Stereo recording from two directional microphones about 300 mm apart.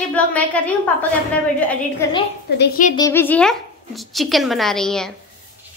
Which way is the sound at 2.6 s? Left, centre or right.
Left.